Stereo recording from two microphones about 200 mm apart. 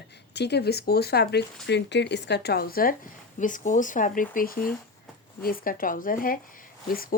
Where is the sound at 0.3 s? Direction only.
55° left (ahead or behind).